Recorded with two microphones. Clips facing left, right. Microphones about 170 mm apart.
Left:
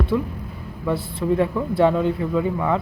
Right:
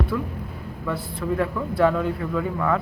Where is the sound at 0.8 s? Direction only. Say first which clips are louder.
Left 5 dB; 25° left (ahead or behind).